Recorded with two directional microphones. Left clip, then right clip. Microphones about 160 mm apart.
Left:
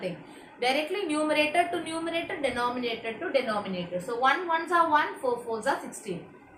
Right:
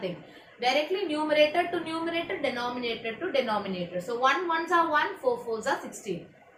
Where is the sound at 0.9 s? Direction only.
25° left (ahead or behind).